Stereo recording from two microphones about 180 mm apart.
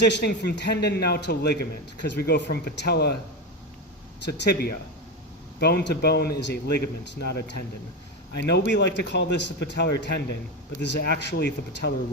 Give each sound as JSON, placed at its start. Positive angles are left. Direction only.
{"t": 0.0, "sound": "a man's voice", "side_deg": 70}
{"t": 4.3, "sound": "a man's voice", "side_deg": 60}
{"t": 8.4, "sound": "a man's voice", "side_deg": 70}